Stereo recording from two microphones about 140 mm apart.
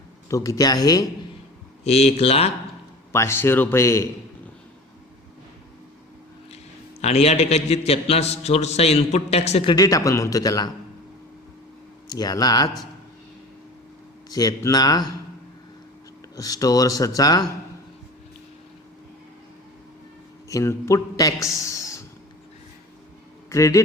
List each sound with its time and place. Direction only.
0.3 s speech: 20° left (ahead or behind)
1.8 s a man's voice: 50° left (ahead or behind)
3.1 s speech: 20° left (ahead or behind)
7.0 s a man's voice: 50° left (ahead or behind)
9.6 s speech: 25° left (ahead or behind)
12.0 s speech: 30° left (ahead or behind)
14.3 s speech: 25° left (ahead or behind)
16.3 s speech: 25° left (ahead or behind)
20.5 s a man's voice: 20° left (ahead or behind)
23.5 s speech: 25° left (ahead or behind)